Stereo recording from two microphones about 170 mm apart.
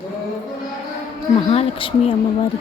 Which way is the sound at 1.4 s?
35° left (ahead or behind).